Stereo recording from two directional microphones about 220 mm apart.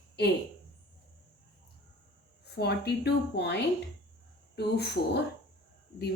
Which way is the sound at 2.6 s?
50° left (ahead or behind).